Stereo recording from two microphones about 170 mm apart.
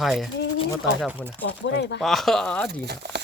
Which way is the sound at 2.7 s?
75° right (ahead or behind).